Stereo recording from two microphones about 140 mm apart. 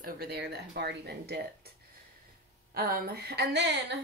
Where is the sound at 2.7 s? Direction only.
90° right.